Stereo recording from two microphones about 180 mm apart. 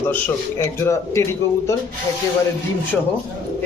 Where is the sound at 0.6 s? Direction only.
15° left (ahead or behind).